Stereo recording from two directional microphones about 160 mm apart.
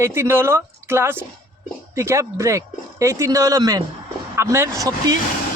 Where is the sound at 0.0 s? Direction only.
15° right (ahead or behind).